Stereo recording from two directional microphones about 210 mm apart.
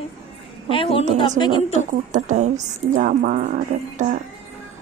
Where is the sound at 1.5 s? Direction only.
35° right (ahead or behind).